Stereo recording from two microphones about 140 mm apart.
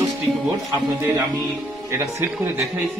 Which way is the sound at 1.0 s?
25° right (ahead or behind).